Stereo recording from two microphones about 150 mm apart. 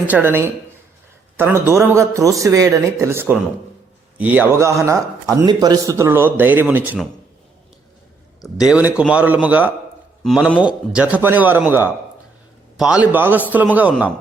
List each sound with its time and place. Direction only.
0.1 s speech: 15° right (ahead or behind)
8.6 s speech: 5° right (ahead or behind)